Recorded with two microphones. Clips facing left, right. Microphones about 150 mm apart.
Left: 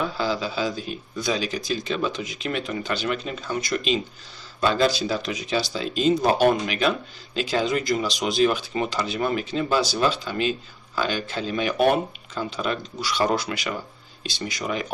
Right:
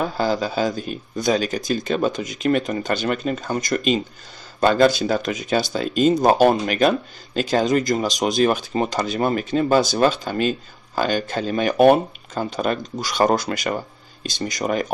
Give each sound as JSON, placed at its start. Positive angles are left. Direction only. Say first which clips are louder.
{"t": 0.0, "sound": "speech", "louder": "right 4 dB", "side_deg": -45}